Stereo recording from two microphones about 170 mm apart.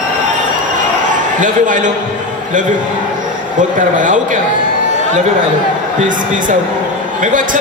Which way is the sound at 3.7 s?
50° right (ahead or behind).